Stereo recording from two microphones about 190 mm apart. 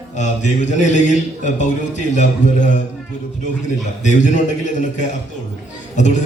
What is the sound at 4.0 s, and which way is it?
A man's voice, 40° left (ahead or behind).